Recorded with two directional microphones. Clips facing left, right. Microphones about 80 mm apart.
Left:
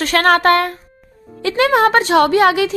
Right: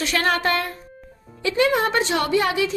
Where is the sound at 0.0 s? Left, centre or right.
Left.